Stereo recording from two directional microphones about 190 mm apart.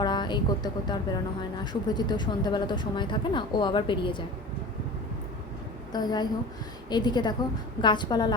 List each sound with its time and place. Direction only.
0.0 s speech: 25° left (ahead or behind)
5.9 s speech: 20° left (ahead or behind)